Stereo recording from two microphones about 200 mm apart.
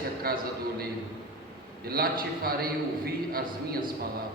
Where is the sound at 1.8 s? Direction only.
50° right (ahead or behind).